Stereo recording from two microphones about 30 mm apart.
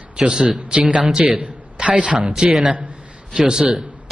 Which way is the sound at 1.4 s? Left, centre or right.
Right.